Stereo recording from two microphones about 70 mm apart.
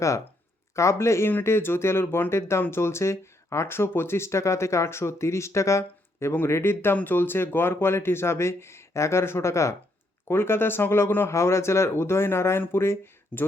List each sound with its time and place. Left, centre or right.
0.8 s speech: left